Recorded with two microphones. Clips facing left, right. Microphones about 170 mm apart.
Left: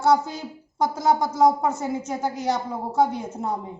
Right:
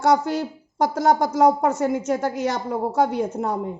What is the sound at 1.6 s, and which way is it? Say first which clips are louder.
A woman's voice: right 5 dB; 75° right (ahead or behind).